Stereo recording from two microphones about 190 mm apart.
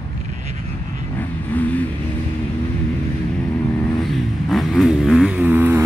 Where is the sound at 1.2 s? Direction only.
10° left (ahead or behind).